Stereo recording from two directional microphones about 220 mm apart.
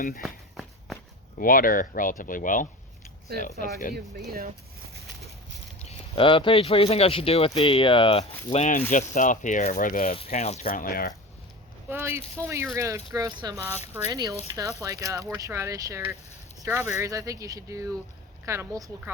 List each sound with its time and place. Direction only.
0.2 s walk: centre (ahead or behind)
1.4 s speech: 40° left (ahead or behind)
5.8 s speech: 25° left (ahead or behind)
10.1 s speech: 25° left (ahead or behind); by 11.1 s 40° left (ahead or behind)
11.9 s speech: 10° right (ahead or behind)